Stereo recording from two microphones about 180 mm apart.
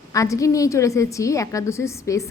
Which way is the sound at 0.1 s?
20° left (ahead or behind).